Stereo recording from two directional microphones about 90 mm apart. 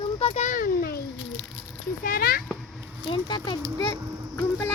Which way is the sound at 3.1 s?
55° left (ahead or behind).